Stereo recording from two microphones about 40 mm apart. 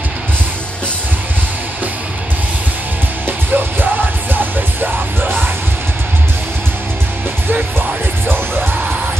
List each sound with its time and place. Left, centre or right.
3.3 s music: right